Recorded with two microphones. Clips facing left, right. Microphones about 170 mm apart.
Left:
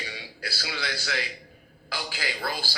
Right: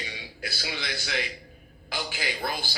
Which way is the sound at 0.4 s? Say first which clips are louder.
Left 1 dB; 20° right (ahead or behind).